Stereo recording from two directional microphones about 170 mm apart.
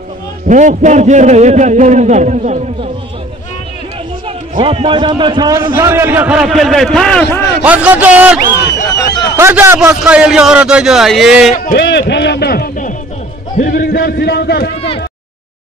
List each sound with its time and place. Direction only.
0.5 s a man's voice: 45° right (ahead or behind)
4.6 s a man's voice: 30° right (ahead or behind); by 7.4 s 5° left (ahead or behind)
7.6 s a man's voice: 10° right (ahead or behind)
8.9 s a sound: 20° left (ahead or behind)
9.4 s a man's voice: 15° right (ahead or behind)
11.5 s a man's voice: 50° left (ahead or behind)
11.8 s a man's voice: 90° left; by 14.7 s 70° left (ahead or behind)